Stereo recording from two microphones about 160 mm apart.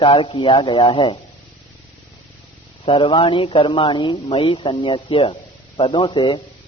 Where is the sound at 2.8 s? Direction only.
30° left (ahead or behind).